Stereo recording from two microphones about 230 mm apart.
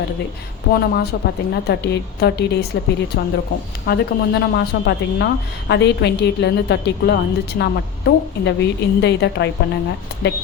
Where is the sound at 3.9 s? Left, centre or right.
Left.